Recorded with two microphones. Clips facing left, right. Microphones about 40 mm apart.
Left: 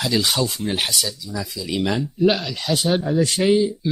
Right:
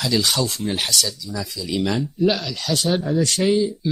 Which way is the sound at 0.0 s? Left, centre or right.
Centre.